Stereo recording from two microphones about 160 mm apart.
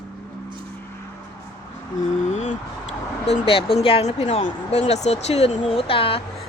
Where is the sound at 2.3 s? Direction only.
45° left (ahead or behind).